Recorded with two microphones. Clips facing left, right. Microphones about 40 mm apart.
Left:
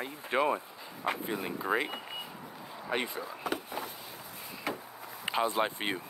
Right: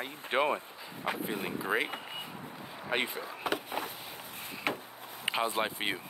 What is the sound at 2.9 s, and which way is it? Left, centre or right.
Speech, right.